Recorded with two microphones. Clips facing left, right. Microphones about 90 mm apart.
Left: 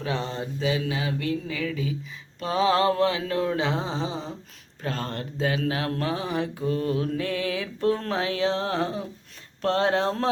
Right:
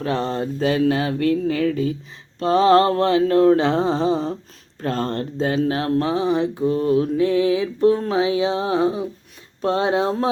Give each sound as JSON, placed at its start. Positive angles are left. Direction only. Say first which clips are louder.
{"t": 0.0, "sound": "a sound", "louder": "right 7 dB", "side_deg": -45}
{"t": 4.8, "sound": "speech", "louder": "right 8 dB", "side_deg": -40}
{"t": 7.1, "sound": "mantra", "louder": "right 10 dB", "side_deg": -20}